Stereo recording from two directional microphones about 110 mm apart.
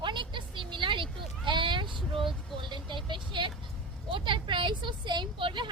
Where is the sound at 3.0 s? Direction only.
45° right (ahead or behind).